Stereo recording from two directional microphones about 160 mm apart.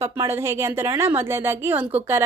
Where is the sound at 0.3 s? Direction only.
15° right (ahead or behind).